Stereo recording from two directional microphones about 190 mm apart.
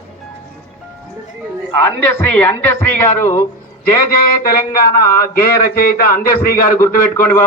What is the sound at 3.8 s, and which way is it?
Speech, 50° left (ahead or behind).